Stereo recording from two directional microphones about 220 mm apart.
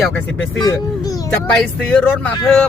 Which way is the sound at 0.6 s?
15° left (ahead or behind).